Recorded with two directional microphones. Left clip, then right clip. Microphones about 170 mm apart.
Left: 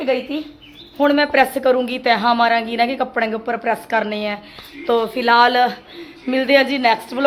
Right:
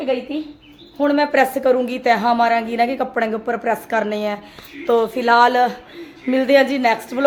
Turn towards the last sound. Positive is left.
turn(degrees=-5)  # may be behind; listen again after turning